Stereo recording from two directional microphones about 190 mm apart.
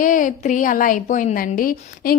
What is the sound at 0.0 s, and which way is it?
A woman's voice, 45° left (ahead or behind).